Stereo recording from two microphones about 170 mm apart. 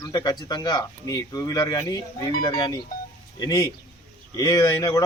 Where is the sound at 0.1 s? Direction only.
20° left (ahead or behind).